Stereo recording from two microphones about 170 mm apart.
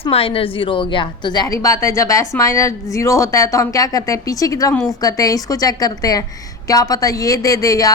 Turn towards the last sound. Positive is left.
turn(degrees=20)  # may be behind; listen again after turning